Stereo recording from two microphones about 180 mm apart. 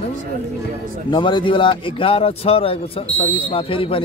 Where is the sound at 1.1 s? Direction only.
25° left (ahead or behind).